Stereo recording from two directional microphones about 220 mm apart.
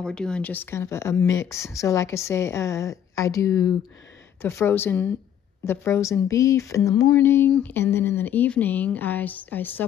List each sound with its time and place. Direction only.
0.0 s speech: 5° left (ahead or behind)